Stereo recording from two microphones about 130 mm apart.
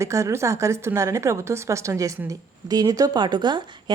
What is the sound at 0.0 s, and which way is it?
A woman's voice, 25° right (ahead or behind).